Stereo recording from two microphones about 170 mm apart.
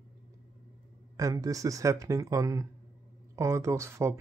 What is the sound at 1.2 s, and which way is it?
Speech, 20° right (ahead or behind).